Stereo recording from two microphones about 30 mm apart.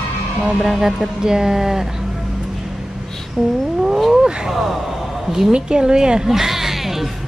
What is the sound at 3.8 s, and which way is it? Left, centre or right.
Wild animals, centre.